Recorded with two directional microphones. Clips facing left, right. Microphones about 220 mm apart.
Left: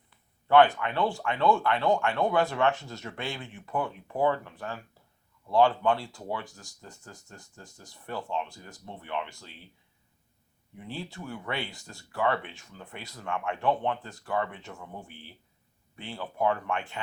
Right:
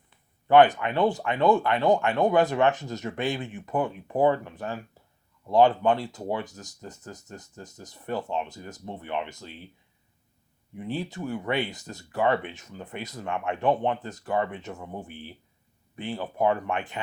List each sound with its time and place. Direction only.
0.1 s speech: 20° right (ahead or behind)
10.8 s speech: 20° right (ahead or behind)